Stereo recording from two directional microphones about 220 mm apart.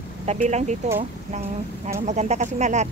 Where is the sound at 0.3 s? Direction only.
30° right (ahead or behind).